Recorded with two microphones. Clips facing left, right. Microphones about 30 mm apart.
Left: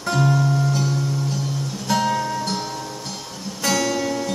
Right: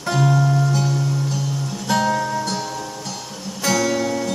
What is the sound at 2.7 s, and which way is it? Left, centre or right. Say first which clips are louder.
Music: right 1 dB; centre.